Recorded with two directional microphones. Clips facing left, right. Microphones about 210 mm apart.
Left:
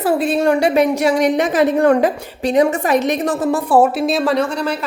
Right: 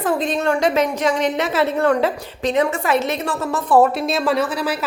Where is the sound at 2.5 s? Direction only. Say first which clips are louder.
Left 5 dB; 40° left (ahead or behind).